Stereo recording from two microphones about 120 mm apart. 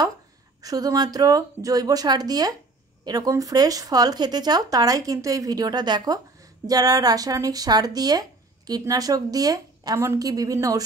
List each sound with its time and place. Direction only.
0.6 s speech: 30° right (ahead or behind)